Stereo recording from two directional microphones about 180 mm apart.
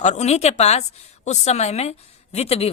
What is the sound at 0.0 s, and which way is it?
Speech, 40° left (ahead or behind).